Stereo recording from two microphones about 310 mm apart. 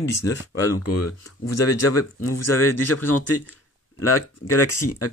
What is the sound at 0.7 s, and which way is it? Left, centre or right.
Speech, left.